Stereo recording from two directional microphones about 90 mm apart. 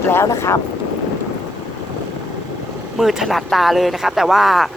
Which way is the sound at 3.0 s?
5° right (ahead or behind).